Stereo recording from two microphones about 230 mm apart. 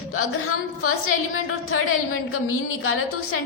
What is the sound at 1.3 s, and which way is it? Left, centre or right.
A woman's voice, left.